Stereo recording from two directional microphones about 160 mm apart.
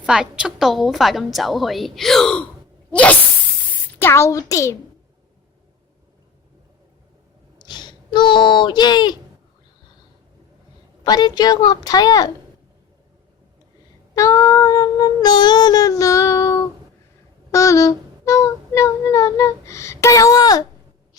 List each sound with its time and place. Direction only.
0.0 s a woman's voice: 5° right (ahead or behind)
2.9 s sneeze: 10° left (ahead or behind)
3.7 s a woman's voice: 15° left (ahead or behind)
7.6 s speech: 25° left (ahead or behind)
11.0 s a woman's voice: 25° left (ahead or behind)
14.2 s a sound: 20° left (ahead or behind)
17.5 s child singing: 20° left (ahead or behind)